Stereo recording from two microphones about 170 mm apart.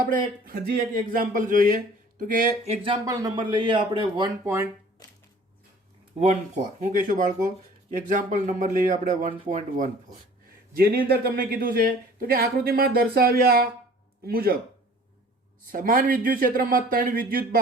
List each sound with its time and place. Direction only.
0.0 s speech: 55° right (ahead or behind); by 4.3 s 30° right (ahead or behind)
4.4 s speech: 15° right (ahead or behind)
6.7 s speech: 50° right (ahead or behind)
10.8 s speech: 60° right (ahead or behind)
15.7 s speech: 55° right (ahead or behind)